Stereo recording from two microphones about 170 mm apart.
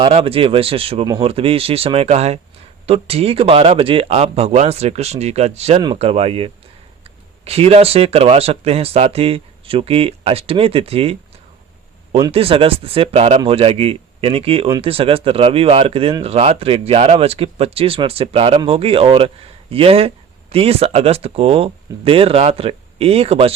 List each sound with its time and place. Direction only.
0.0 s speech: 35° right (ahead or behind)